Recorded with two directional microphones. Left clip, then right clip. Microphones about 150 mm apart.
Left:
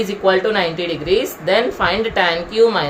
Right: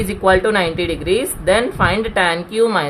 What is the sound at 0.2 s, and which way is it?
Speech, 50° right (ahead or behind).